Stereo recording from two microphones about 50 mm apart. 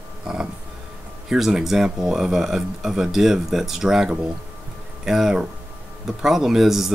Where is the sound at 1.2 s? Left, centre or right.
Centre.